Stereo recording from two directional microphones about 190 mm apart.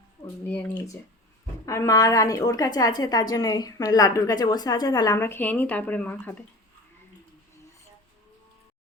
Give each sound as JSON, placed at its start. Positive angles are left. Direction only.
{"t": 0.4, "sound": "a woman's voice", "side_deg": 10}